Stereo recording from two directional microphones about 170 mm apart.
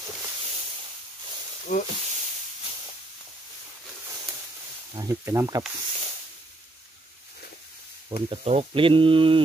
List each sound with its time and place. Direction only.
1.7 s speech: 50° left (ahead or behind)
4.9 s speech: 20° right (ahead or behind)
8.1 s speech: 35° right (ahead or behind)